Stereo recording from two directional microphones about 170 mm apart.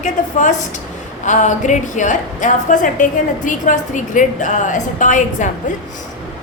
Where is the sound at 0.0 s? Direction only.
50° left (ahead or behind).